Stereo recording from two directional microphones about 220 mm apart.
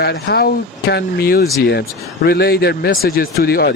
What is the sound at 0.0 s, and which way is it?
Speech, 45° left (ahead or behind).